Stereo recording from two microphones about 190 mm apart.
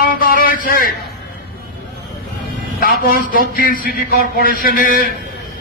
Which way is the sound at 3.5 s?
50° left (ahead or behind).